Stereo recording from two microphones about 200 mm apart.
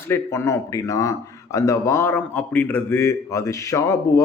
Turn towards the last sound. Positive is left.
turn(degrees=15)  # may be behind; listen again after turning